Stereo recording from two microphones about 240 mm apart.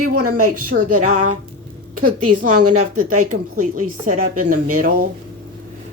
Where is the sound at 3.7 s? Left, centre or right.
Right.